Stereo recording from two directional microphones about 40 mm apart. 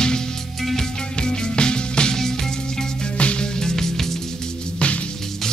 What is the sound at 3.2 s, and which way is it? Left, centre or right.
Music, left.